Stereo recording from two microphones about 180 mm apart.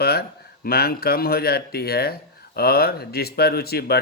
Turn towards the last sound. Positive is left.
turn(degrees=60)  # may be behind; listen again after turning